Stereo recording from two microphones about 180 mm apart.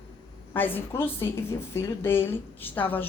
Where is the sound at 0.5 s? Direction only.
10° left (ahead or behind).